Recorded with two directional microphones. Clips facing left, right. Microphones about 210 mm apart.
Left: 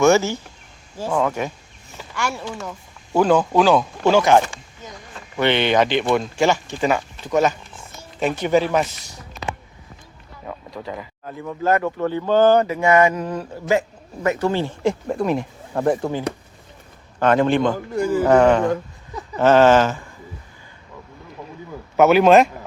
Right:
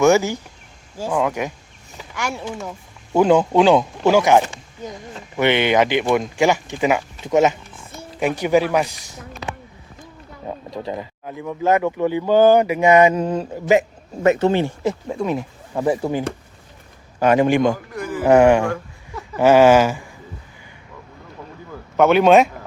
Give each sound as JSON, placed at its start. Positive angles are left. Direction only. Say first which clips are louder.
{"t": 0.0, "sound": "speech", "louder": "right 1 dB", "side_deg": -15}
{"t": 10.4, "sound": "speech", "louder": "right 4 dB", "side_deg": -25}
{"t": 11.3, "sound": "speech", "louder": "right 2 dB", "side_deg": -10}
{"t": 14.8, "sound": "speech", "louder": "left 1 dB", "side_deg": 0}
{"t": 17.9, "sound": "a man's voice", "louder": "left 7 dB", "side_deg": 25}
{"t": 18.3, "sound": "speech", "louder": "right 3 dB", "side_deg": -15}
{"t": 21.9, "sound": "speech", "louder": "even", "side_deg": 5}